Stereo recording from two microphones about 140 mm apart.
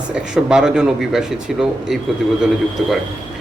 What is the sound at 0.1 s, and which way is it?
Speech, 5° right (ahead or behind).